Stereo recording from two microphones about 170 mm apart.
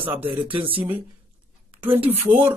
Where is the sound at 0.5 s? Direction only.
30° right (ahead or behind).